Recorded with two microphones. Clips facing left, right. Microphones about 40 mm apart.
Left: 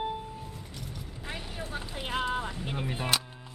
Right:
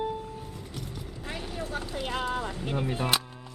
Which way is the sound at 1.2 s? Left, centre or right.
Centre.